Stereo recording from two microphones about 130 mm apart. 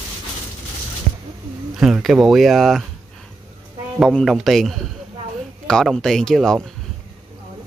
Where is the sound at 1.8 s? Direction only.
Centre (ahead or behind).